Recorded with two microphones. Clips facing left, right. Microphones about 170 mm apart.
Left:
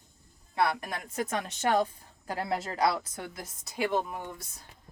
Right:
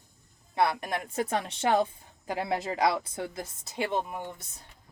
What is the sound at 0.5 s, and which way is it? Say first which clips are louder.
Speech: right 2 dB; 25° right (ahead or behind).